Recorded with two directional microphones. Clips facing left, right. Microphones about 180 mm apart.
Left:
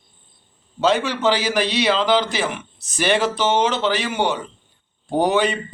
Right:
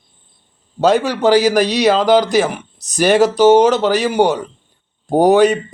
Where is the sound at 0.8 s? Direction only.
40° right (ahead or behind).